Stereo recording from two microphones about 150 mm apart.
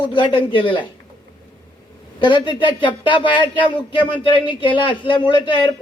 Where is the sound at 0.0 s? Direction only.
30° left (ahead or behind).